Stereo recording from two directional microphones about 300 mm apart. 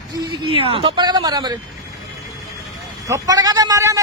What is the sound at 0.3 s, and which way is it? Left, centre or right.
Speech, centre.